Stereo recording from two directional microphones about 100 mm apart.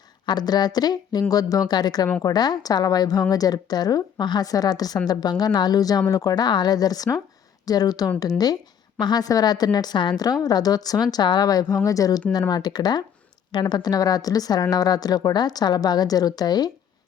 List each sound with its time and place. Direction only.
0.3 s a woman's voice: 45° left (ahead or behind)